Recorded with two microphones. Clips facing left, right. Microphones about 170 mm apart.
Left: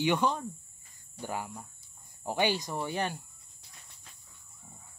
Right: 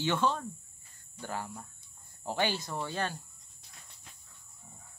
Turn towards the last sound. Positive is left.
turn(degrees=15)  # may be behind; listen again after turning